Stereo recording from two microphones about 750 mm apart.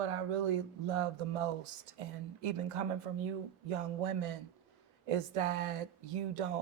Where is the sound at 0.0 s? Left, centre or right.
Right.